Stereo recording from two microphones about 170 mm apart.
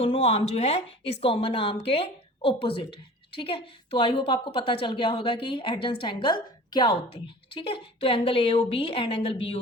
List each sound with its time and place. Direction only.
0.0 s a woman's voice: 35° left (ahead or behind)